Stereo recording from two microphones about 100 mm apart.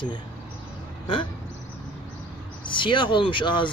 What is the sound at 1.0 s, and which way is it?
Speech, 50° left (ahead or behind).